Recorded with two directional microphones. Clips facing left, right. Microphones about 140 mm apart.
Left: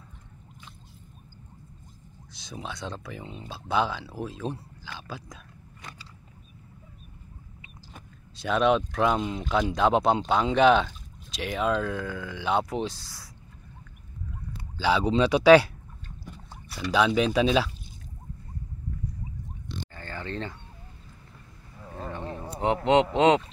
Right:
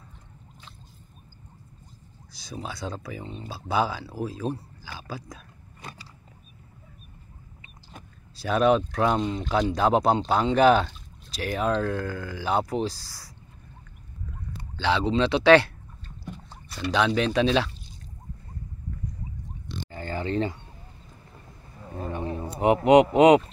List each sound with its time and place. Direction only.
2.6 s speech: 5° right (ahead or behind)
7.9 s speech: 5° right (ahead or behind)
14.8 s speech: 10° left (ahead or behind)
19.9 s a sound: 15° right (ahead or behind)
21.8 s a sound: 15° right (ahead or behind)
22.8 s speech: 10° right (ahead or behind)